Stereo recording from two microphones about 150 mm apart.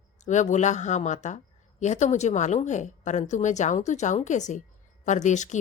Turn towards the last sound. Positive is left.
turn(degrees=55)  # may be behind; listen again after turning